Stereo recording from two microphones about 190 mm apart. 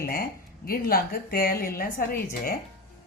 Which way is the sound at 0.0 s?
50° left (ahead or behind).